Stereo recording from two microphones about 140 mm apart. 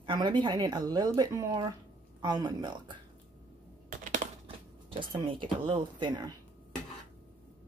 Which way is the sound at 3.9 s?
60° right (ahead or behind).